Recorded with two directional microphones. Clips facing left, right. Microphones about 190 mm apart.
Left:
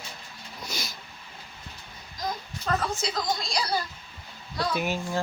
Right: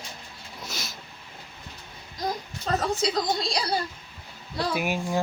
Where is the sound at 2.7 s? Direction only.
30° right (ahead or behind).